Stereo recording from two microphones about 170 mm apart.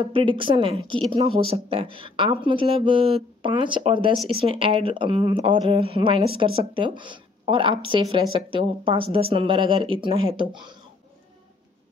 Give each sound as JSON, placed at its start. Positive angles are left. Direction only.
{"t": 0.0, "sound": "speech", "side_deg": -30}